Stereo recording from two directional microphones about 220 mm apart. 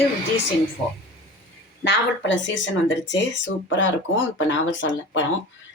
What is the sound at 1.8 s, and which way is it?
Speech, 55° left (ahead or behind).